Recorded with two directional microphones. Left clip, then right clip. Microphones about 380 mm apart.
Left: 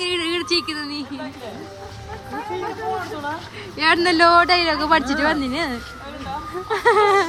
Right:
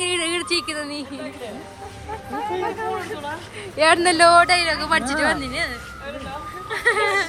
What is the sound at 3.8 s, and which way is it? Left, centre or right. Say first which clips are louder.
A woman's voice: even; centre.